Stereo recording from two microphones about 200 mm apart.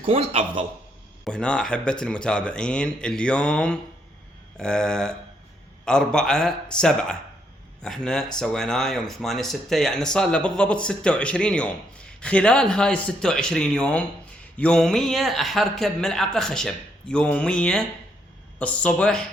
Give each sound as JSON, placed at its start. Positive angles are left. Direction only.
{"t": 0.0, "sound": "a man's voice", "side_deg": -30}
{"t": 1.2, "sound": "speech", "side_deg": 5}